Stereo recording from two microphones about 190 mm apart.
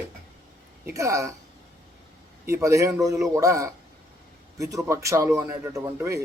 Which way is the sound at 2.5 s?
15° right (ahead or behind).